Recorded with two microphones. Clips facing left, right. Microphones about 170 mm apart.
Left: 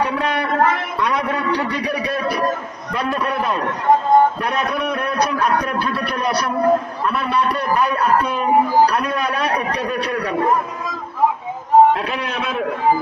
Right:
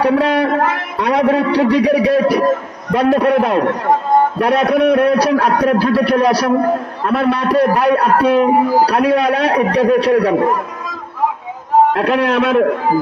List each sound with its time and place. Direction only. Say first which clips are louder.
0.0 s a man's voice: right 7 dB; 90° right
11.9 s a man's voice: right 7 dB; 75° right (ahead or behind)